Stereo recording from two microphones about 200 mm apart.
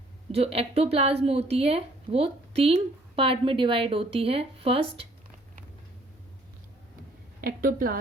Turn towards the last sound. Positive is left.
turn(degrees=-45)  # may be behind; listen again after turning